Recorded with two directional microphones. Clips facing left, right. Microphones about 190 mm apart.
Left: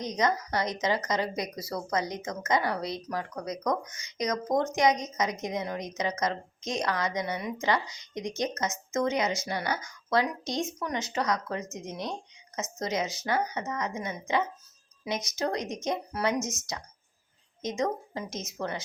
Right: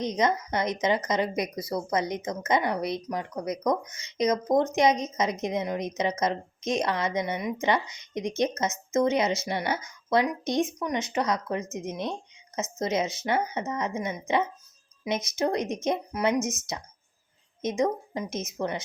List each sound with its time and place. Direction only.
0.0 s a woman's voice: 20° right (ahead or behind)
17.6 s a woman's voice: 20° right (ahead or behind)